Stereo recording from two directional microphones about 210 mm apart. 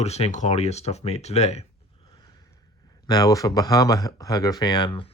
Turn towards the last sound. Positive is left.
turn(degrees=20)  # may be behind; listen again after turning